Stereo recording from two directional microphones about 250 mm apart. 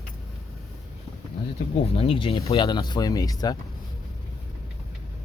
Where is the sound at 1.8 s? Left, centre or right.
Left.